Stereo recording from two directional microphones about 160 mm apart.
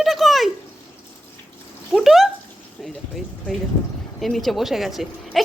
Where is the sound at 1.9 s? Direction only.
Centre (ahead or behind).